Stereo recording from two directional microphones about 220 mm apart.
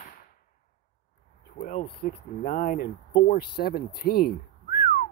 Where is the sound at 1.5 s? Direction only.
35° left (ahead or behind).